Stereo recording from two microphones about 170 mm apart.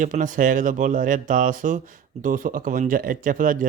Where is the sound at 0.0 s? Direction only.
50° right (ahead or behind).